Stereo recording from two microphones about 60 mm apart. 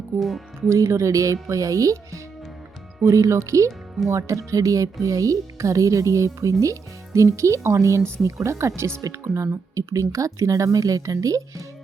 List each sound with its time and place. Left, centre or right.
0.2 s speech: centre
0.7 s speech: right